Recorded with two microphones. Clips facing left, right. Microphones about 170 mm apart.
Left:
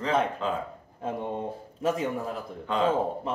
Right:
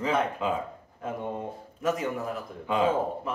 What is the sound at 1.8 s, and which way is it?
Speech, 30° left (ahead or behind).